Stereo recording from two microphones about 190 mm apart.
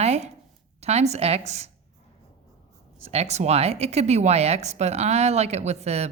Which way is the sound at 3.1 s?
35° right (ahead or behind).